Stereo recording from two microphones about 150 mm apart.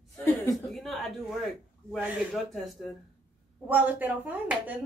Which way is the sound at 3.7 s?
10° right (ahead or behind).